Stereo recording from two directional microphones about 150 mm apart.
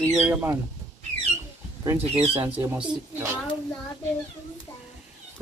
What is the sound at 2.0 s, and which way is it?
Speech, 40° right (ahead or behind).